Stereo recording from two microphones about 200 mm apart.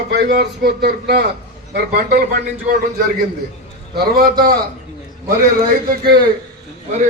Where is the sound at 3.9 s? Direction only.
50° right (ahead or behind).